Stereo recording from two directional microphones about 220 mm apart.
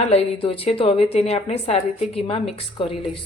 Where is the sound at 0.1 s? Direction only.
25° left (ahead or behind).